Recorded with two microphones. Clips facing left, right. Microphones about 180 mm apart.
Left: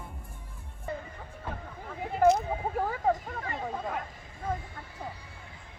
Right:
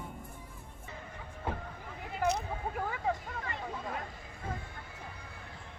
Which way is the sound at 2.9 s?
40° left (ahead or behind).